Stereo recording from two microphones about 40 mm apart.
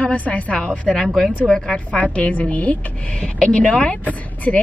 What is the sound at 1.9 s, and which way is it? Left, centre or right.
Speech, left.